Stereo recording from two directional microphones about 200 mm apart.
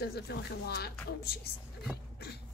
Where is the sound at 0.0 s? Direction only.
50° left (ahead or behind).